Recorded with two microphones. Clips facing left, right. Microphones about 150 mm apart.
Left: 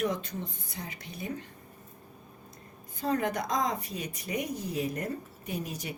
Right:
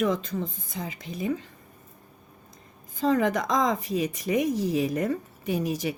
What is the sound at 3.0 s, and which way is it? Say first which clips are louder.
Speech: right 6 dB; 90° right.